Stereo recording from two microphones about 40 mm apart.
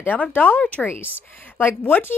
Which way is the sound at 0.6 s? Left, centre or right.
Left.